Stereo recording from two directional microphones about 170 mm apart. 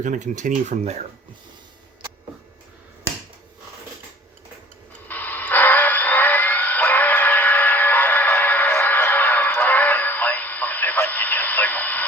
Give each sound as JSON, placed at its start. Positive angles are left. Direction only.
{"t": 0.0, "sound": "speech", "side_deg": -45}
{"t": 5.0, "sound": "radio", "side_deg": 10}